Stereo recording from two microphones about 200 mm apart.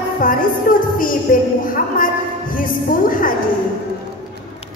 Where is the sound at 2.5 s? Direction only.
45° left (ahead or behind).